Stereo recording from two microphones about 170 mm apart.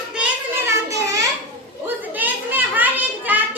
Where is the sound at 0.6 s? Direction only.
20° right (ahead or behind).